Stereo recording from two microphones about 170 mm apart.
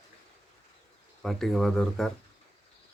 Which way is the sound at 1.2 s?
Centre (ahead or behind).